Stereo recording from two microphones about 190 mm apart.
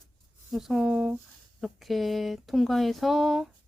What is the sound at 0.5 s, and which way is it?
Speech, centre (ahead or behind).